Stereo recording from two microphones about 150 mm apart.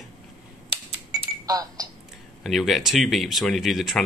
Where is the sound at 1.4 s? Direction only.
25° right (ahead or behind).